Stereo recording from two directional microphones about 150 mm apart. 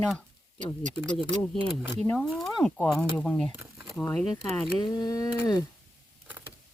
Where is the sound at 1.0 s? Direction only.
10° right (ahead or behind).